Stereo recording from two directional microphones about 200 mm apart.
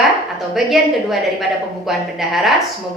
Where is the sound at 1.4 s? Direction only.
Centre (ahead or behind).